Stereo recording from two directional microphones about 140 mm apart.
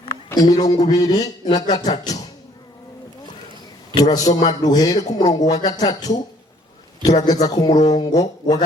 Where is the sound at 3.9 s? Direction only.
25° left (ahead or behind).